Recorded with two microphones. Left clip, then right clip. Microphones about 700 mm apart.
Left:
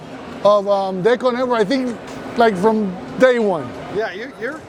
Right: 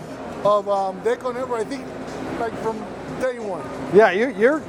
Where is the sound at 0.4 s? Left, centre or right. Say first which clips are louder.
Left 5 dB; left.